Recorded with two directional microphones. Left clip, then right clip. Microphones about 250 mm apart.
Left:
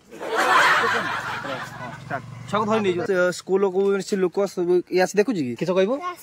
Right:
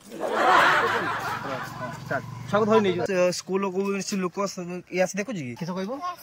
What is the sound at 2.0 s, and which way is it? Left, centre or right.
Speech, centre.